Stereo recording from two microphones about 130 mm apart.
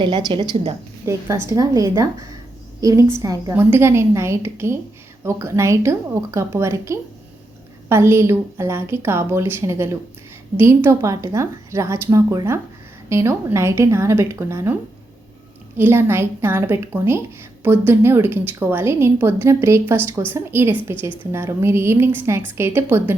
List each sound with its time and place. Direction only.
0.0 s a woman's voice: 35° right (ahead or behind)
1.5 s a woman's voice: 25° right (ahead or behind)
15.8 s a woman's voice: 15° right (ahead or behind)